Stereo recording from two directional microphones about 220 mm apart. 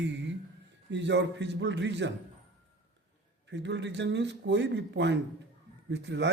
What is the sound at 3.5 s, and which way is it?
A man's voice, 55° right (ahead or behind).